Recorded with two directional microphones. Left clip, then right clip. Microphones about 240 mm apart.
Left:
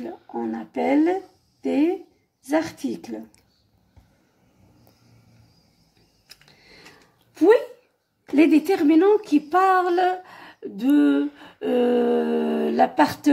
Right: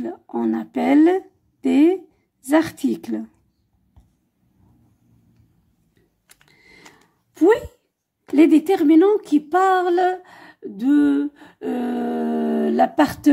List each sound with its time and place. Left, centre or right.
0.0 s a sound: right
2.5 s a woman's voice: right
6.6 s sewing machine: right
7.3 s speech: right
8.4 s speech: right